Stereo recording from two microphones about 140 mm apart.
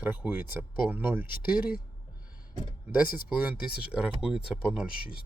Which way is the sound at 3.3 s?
10° right (ahead or behind).